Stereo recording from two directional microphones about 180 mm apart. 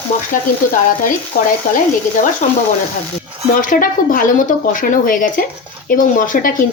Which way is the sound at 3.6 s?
50° left (ahead or behind).